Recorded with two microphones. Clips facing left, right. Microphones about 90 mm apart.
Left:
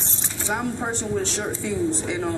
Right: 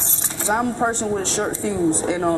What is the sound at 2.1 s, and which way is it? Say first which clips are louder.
Speech: right 6 dB; 45° right (ahead or behind).